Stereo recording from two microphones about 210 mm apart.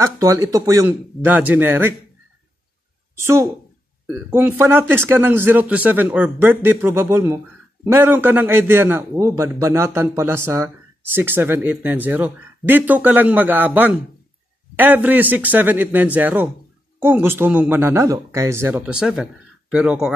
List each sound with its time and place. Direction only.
0.0 s a man's voice: 15° right (ahead or behind)
3.2 s a man's voice: 10° right (ahead or behind)